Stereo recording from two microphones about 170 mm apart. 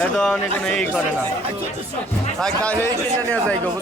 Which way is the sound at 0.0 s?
5° left (ahead or behind).